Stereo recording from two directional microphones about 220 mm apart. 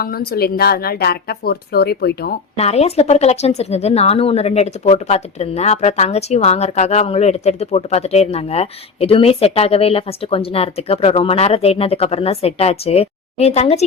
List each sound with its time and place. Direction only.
0.0 s speech: 45° left (ahead or behind)
2.6 s speech: 30° left (ahead or behind)